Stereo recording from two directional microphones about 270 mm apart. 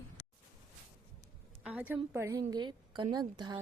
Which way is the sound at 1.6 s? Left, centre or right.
Centre.